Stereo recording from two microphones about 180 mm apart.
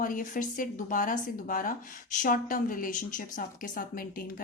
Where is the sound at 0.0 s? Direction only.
50° left (ahead or behind).